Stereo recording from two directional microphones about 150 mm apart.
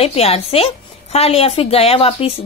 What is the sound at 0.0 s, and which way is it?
Speech, 40° left (ahead or behind).